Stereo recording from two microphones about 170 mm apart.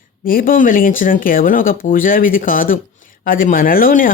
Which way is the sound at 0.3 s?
55° left (ahead or behind).